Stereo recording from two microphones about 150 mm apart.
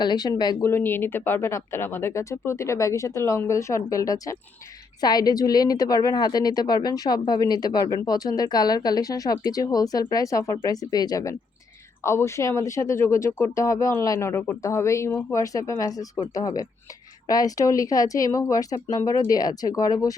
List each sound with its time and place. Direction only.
0.0 s speech: 30° left (ahead or behind)
0.6 s speech: 15° left (ahead or behind)